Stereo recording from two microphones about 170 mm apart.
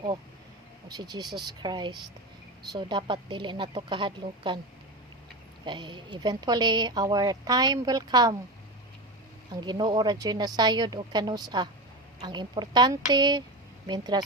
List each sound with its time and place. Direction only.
0.9 s a woman's voice: 25° right (ahead or behind)
5.6 s a woman's voice: 25° right (ahead or behind)
9.5 s a woman's voice: 25° right (ahead or behind)